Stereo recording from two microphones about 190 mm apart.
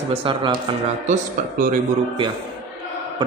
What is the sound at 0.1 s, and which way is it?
Speech, 30° right (ahead or behind).